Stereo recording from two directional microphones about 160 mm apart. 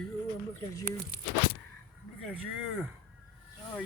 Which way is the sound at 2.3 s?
10° right (ahead or behind).